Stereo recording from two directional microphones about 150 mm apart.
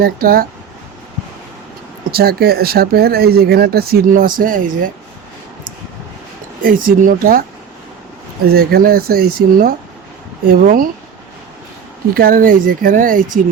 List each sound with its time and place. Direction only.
0.0 s speech: 80° right
2.0 s speech: 90° right; by 4.9 s 65° right (ahead or behind)
6.6 s speech: 65° right (ahead or behind)
8.4 s speech: 90° right
10.5 s speech: 70° right (ahead or behind)
12.1 s speech: 75° right (ahead or behind)